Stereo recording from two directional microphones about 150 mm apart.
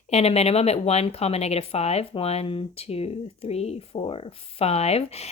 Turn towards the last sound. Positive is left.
turn(degrees=45)  # may be behind; listen again after turning